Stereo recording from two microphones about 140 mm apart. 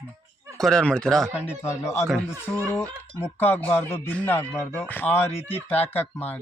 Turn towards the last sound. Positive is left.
turn(degrees=15)  # may be behind; listen again after turning